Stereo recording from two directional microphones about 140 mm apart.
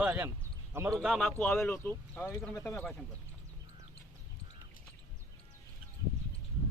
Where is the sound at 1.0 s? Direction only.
Centre (ahead or behind).